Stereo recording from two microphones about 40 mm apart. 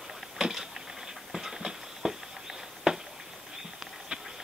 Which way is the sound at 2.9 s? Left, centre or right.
Centre.